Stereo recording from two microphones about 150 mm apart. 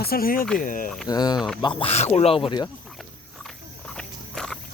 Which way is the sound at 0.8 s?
Centre (ahead or behind).